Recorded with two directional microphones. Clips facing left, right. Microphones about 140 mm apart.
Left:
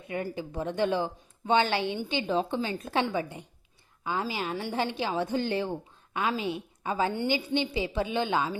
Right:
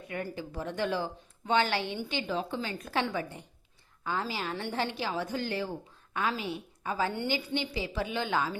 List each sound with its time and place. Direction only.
0.1 s speech: 20° left (ahead or behind)